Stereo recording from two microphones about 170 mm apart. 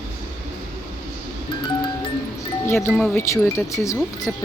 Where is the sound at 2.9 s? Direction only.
5° left (ahead or behind).